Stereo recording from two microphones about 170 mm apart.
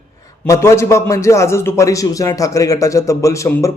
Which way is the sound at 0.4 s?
15° left (ahead or behind).